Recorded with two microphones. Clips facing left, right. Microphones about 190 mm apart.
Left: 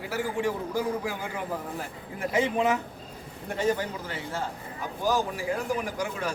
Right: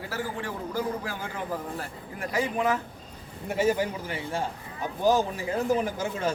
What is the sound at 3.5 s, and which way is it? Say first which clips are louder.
A man's voice: right 2 dB; 5° right (ahead or behind).